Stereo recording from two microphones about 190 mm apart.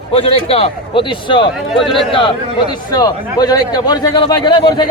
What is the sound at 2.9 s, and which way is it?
A man's voice, 20° left (ahead or behind).